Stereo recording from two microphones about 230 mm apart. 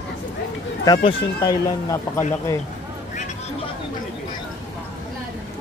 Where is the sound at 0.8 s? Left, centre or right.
Centre.